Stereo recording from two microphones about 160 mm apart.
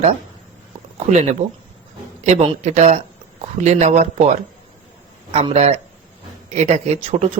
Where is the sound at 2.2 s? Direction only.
40° right (ahead or behind).